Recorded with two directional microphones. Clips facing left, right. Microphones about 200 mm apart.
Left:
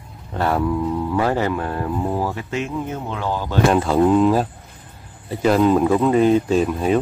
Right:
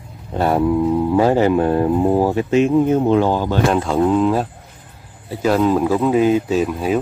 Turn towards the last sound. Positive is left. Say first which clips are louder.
# even
turn(degrees=-5)  # may be behind; listen again after turning